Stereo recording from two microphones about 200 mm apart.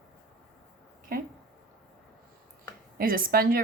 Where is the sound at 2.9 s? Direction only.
45° right (ahead or behind).